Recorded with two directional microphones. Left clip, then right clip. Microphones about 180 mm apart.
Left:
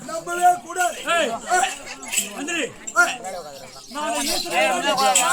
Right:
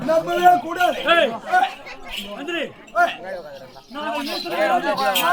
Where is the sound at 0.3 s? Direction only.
15° left (ahead or behind).